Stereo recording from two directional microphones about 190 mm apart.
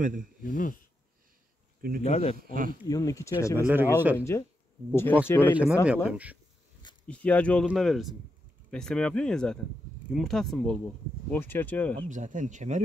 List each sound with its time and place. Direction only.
0.0 s speech: 45° right (ahead or behind)
0.4 s speech: 45° left (ahead or behind)
2.0 s speech: 35° left (ahead or behind)
2.3 s speech: 50° right (ahead or behind)
2.9 s speech: 15° left (ahead or behind)
3.5 s speech: 10° right (ahead or behind)
4.2 s speech: 15° left (ahead or behind)
5.5 s speech: 5° right (ahead or behind)
7.1 s speech: 5° left (ahead or behind)
12.1 s speech: 40° right (ahead or behind)